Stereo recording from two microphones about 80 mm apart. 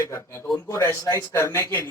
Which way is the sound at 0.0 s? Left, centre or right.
Left.